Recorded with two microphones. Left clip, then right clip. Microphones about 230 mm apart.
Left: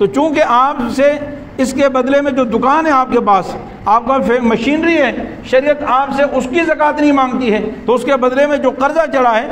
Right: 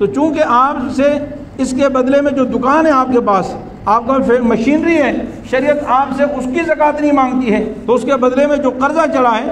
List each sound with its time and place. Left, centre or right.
0.0 s a man's voice: left